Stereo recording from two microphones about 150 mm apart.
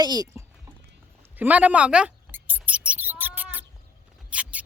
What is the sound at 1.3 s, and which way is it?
Mouse, 10° right (ahead or behind).